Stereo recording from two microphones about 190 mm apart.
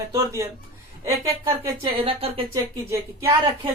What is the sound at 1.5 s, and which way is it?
Speech, 15° right (ahead or behind).